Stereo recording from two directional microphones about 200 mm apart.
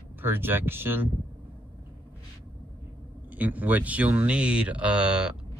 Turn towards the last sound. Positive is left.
turn(degrees=-5)  # may be behind; listen again after turning